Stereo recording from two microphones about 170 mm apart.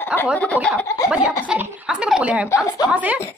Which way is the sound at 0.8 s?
15° left (ahead or behind).